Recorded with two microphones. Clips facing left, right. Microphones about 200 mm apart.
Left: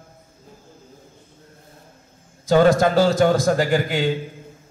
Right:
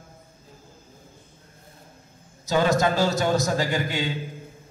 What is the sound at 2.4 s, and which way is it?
A man's voice, 50° left (ahead or behind).